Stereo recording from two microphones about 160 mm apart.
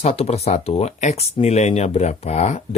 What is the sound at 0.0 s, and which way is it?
Speech, 40° left (ahead or behind).